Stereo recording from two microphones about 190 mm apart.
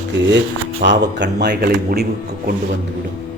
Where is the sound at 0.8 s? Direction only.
70° right (ahead or behind).